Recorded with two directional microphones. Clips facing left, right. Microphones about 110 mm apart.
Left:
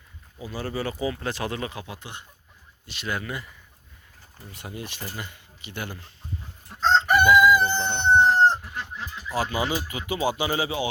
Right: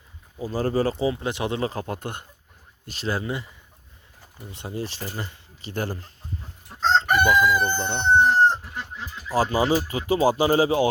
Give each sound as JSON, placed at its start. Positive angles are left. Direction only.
{"t": 0.3, "sound": "speech", "side_deg": -40}
{"t": 0.9, "sound": "speech", "side_deg": -25}
{"t": 1.7, "sound": "speech", "side_deg": -45}
{"t": 2.8, "sound": "speech", "side_deg": -40}
{"t": 4.5, "sound": "speech", "side_deg": -30}
{"t": 7.3, "sound": "speech", "side_deg": -40}
{"t": 7.9, "sound": "speech", "side_deg": -10}
{"t": 9.3, "sound": "speech", "side_deg": -35}